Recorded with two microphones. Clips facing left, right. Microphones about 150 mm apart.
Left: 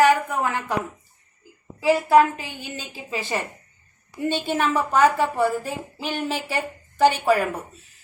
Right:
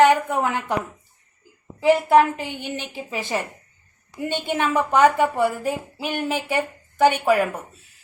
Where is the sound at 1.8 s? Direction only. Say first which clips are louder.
Right 1 dB; 20° right (ahead or behind).